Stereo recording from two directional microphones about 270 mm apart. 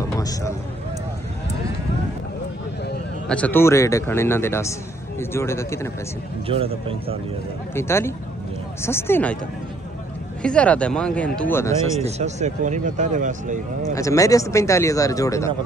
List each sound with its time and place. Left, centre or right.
0.1 s speech: centre
3.3 s speech: centre
6.4 s speech: right
7.7 s speech: centre
10.4 s speech: centre
12.0 s speech: right
13.9 s speech: centre